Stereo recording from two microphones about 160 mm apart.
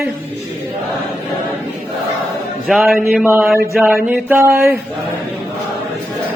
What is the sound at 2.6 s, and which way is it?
Speech, centre (ahead or behind).